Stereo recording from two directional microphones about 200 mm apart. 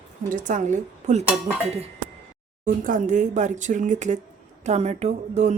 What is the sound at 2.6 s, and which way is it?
Speech, 40° right (ahead or behind).